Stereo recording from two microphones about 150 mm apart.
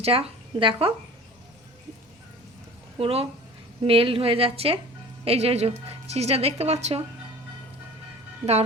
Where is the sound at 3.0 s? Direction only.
40° right (ahead or behind).